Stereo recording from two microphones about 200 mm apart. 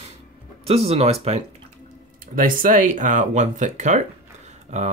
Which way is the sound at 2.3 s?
45° right (ahead or behind).